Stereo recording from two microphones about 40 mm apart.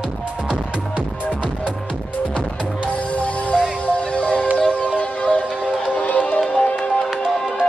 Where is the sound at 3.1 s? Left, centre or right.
Left.